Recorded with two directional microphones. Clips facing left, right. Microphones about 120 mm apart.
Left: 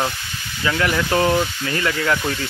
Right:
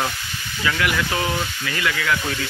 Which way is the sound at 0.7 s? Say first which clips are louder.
Left 3 dB; 35° left (ahead or behind).